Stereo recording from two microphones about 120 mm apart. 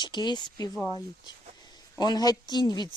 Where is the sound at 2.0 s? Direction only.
35° left (ahead or behind).